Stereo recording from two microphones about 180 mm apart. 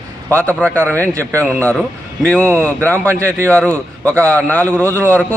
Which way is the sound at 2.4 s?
15° right (ahead or behind).